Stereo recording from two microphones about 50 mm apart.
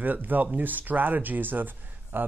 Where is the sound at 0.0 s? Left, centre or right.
Right.